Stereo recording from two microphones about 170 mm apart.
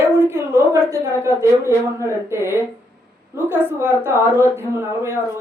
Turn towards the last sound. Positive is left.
turn(degrees=-15)  # may be behind; listen again after turning